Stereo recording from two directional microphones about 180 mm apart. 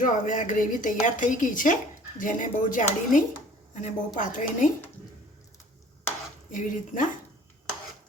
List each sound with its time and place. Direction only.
0.0 s speech: 45° left (ahead or behind)
6.5 s speech: 45° left (ahead or behind)